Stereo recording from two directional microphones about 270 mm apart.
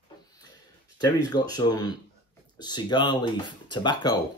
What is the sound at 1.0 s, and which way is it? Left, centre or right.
Speech, centre.